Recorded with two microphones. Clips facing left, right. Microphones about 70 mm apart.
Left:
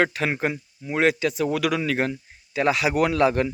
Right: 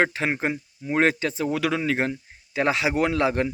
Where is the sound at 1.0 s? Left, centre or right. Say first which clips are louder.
Left 1 dB; right.